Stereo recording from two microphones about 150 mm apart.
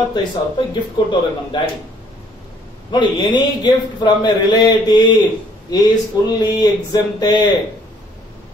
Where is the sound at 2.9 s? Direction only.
30° left (ahead or behind).